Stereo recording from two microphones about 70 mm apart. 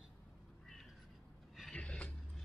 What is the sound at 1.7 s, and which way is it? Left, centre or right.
Music, centre.